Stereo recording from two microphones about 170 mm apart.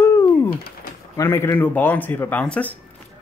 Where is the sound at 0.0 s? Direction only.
15° left (ahead or behind).